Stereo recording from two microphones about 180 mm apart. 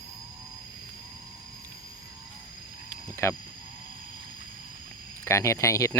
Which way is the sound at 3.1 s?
15° left (ahead or behind).